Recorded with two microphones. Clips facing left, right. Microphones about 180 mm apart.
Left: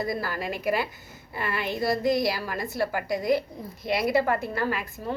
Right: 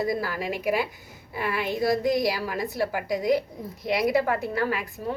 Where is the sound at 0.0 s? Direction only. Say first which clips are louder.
Right 2 dB; 15° right (ahead or behind).